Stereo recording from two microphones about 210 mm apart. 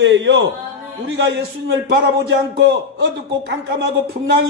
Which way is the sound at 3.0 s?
60° right (ahead or behind).